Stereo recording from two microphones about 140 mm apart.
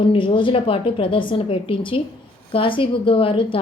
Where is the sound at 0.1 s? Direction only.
35° left (ahead or behind).